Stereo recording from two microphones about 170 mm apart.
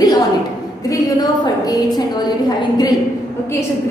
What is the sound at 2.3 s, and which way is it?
Speech, 25° left (ahead or behind).